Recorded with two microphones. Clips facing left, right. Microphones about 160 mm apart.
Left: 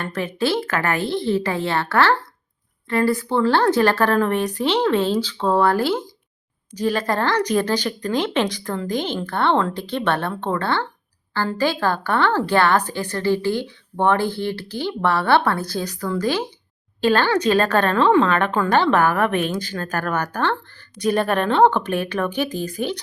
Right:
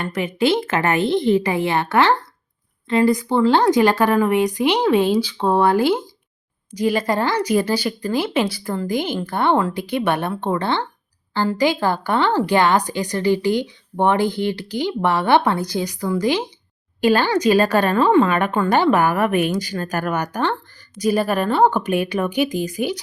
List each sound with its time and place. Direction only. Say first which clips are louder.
0.0 s speech: right 3 dB; 15° right (ahead or behind)